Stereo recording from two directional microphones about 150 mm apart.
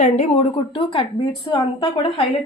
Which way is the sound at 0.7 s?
35° left (ahead or behind).